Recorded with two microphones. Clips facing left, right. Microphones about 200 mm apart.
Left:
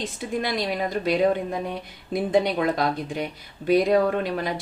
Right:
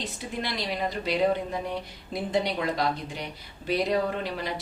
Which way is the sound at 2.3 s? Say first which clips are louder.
Left 5 dB; 50° left (ahead or behind).